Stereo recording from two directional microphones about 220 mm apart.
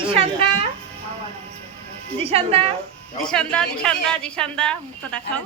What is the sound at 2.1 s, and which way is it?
Speech, 25° right (ahead or behind).